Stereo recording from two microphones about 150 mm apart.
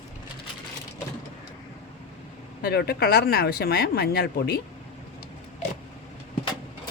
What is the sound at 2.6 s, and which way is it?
Speech, 90° left.